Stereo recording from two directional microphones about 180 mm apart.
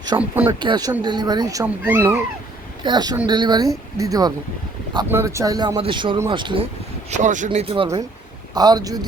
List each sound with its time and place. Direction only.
0.1 s speech: 20° right (ahead or behind)
2.8 s speech: 25° right (ahead or behind)
7.1 s speech: 45° right (ahead or behind); by 9.0 s 20° right (ahead or behind)